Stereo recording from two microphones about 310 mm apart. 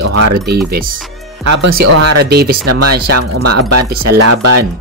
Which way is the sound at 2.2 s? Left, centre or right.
Right.